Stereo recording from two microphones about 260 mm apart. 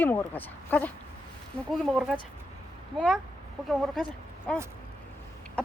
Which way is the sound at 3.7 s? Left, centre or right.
Centre.